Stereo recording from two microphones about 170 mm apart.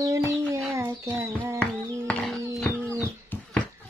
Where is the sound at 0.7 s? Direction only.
15° right (ahead or behind).